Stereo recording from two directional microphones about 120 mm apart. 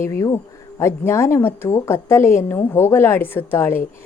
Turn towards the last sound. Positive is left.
turn(degrees=20)  # may be behind; listen again after turning